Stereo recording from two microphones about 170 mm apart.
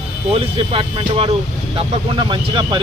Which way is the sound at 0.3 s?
35° right (ahead or behind).